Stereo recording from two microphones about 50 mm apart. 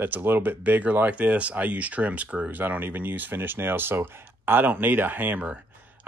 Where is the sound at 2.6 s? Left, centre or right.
Right.